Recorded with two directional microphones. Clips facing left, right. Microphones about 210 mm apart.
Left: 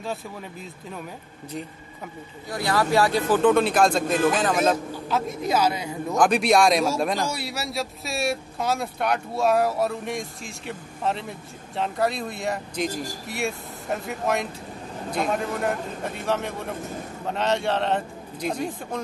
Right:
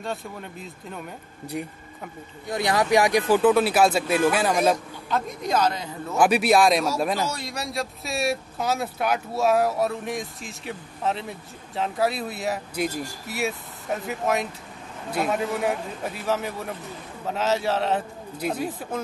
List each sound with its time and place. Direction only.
0.0 s speech: centre (ahead or behind)
2.5 s speech: 20° right (ahead or behind)
5.1 s speech: 5° left (ahead or behind)
6.1 s speech: 5° right (ahead or behind)
7.2 s speech: 10° left (ahead or behind)